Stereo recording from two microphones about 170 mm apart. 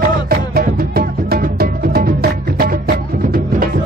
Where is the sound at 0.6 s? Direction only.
65° right (ahead or behind).